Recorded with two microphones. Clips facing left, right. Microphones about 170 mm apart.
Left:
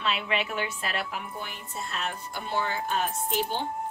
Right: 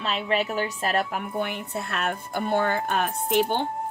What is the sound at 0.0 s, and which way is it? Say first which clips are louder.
A woman's voice: right 4 dB; 40° right (ahead or behind).